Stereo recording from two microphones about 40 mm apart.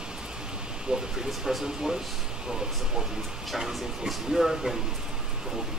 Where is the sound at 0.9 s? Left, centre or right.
Right.